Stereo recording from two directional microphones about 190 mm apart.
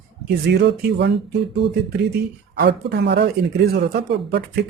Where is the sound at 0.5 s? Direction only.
60° right (ahead or behind).